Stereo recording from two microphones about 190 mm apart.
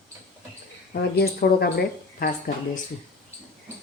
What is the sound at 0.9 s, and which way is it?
Speech, 55° left (ahead or behind).